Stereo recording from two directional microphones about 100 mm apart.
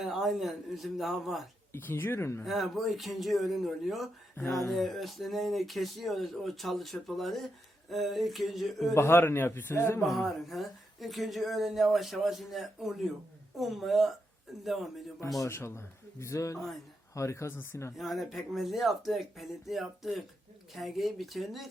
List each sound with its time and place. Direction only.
0.0 s speech: 5° right (ahead or behind)
1.7 s a man's voice: 20° left (ahead or behind)
2.4 s speech: centre (ahead or behind)
4.4 s a man's voice: 25° left (ahead or behind)
4.7 s speech: centre (ahead or behind)
9.0 s a man's voice: 25° left (ahead or behind)
10.1 s speech: centre (ahead or behind)
15.4 s a man's voice: 25° left (ahead or behind)
17.9 s speech: centre (ahead or behind)